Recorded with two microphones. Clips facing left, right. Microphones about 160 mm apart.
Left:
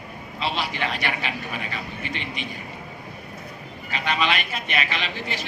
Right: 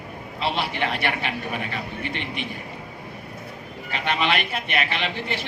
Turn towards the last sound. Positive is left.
turn(degrees=-60)  # may be behind; listen again after turning